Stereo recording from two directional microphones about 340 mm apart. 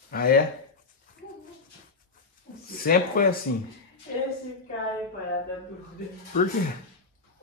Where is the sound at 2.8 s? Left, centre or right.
Left.